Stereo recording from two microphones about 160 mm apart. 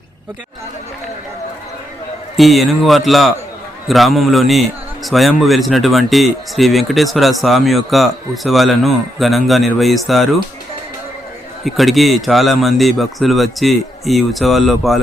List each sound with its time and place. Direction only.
2.3 s a man's voice: centre (ahead or behind)
11.6 s a man's voice: centre (ahead or behind)